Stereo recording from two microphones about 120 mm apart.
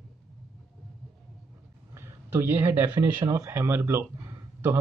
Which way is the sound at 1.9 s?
20° right (ahead or behind).